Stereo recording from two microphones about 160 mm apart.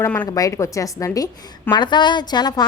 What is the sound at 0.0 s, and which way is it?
Speech, 10° left (ahead or behind).